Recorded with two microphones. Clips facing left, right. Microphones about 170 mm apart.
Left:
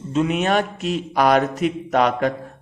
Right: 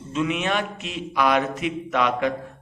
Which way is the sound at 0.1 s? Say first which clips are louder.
Left 5 dB; 40° left (ahead or behind).